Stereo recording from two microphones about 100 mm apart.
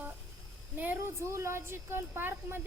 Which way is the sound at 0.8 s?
20° right (ahead or behind).